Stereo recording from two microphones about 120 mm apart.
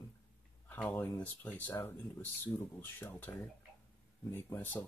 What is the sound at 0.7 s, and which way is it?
Speech, 15° left (ahead or behind).